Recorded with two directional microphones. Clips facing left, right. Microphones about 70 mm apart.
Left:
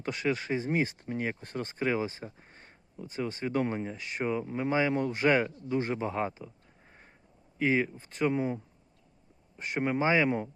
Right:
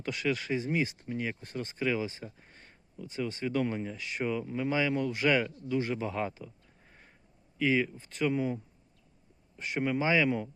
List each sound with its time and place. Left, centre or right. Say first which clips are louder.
0.0 s speech: left 1 dB; left
7.6 s speech: left 1 dB; left